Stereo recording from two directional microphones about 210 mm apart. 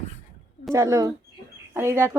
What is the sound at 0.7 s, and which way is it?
A woman's voice, 15° right (ahead or behind).